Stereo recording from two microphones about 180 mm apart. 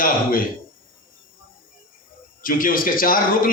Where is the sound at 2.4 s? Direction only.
50° left (ahead or behind).